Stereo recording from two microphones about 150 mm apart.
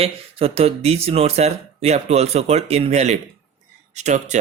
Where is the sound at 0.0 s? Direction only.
40° right (ahead or behind).